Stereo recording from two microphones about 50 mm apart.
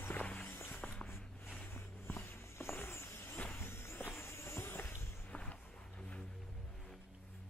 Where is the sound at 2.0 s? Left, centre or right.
Left.